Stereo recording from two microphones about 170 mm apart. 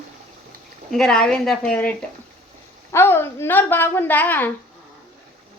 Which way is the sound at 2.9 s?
15° left (ahead or behind).